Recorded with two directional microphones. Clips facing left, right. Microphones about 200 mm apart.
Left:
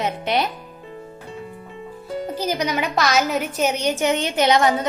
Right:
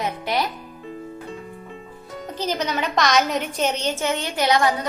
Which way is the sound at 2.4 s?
10° left (ahead or behind).